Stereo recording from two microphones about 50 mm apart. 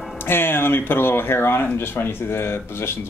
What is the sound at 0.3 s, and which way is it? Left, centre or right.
Speech, left.